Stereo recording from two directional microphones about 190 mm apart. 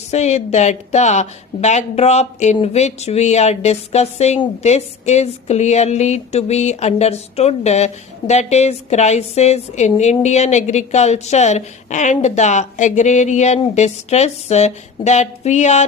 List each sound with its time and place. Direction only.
0.1 s speech: 35° left (ahead or behind)